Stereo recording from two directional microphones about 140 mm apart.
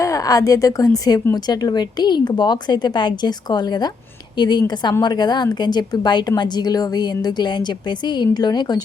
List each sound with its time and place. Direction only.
0.0 s a woman's voice: 25° left (ahead or behind)